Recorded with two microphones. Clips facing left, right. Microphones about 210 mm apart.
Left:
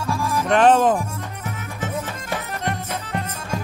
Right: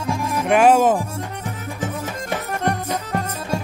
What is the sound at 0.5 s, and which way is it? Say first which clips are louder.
Speech: right 1 dB; 10° right (ahead or behind).